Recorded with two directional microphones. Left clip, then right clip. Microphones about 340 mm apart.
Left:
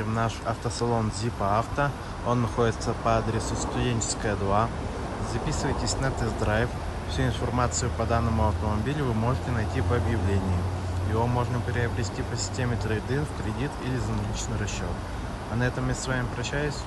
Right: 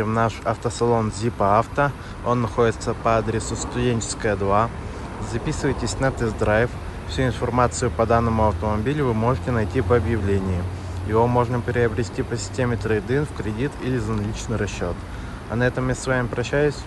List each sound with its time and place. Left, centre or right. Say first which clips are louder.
0.0 s speech: right 7 dB; centre
15.6 s speech: right 7 dB; centre